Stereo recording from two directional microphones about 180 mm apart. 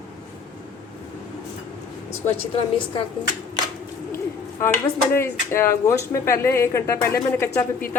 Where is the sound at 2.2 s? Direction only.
40° left (ahead or behind).